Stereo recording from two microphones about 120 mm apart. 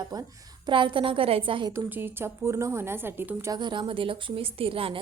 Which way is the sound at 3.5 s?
40° right (ahead or behind).